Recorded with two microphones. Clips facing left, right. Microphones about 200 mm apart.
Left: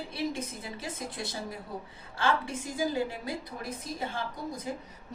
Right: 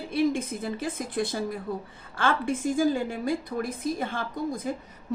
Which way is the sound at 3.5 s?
90° right.